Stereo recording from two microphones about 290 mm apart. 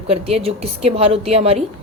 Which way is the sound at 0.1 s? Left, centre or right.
Centre.